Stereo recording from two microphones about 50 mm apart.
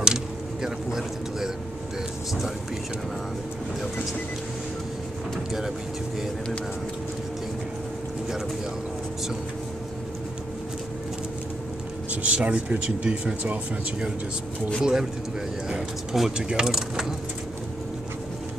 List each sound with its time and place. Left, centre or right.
0.0 s a sound: centre
12.1 s speech: right
14.8 s speech: centre
16.1 s speech: centre